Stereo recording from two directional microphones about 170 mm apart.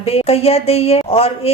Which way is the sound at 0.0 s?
35° left (ahead or behind).